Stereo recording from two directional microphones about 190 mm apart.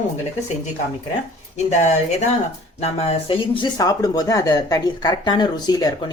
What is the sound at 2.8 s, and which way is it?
Speech, 30° left (ahead or behind).